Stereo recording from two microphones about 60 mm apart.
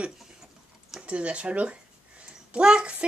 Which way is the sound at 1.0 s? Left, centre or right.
Right.